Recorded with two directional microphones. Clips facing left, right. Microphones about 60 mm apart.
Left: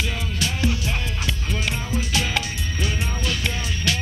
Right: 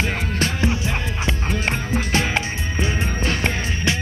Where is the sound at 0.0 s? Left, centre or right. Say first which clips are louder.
Right 4 dB; right.